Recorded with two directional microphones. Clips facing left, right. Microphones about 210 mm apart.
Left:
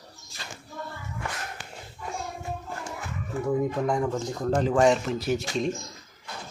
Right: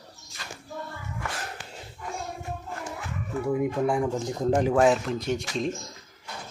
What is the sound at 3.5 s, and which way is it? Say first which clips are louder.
Speech: right 1 dB; 15° right (ahead or behind).